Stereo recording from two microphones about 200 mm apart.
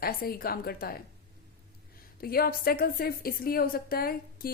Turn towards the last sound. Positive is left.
turn(degrees=50)  # may be behind; listen again after turning